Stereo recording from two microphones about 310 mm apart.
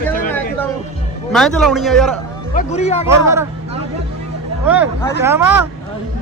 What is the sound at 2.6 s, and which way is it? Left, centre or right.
Speech, left.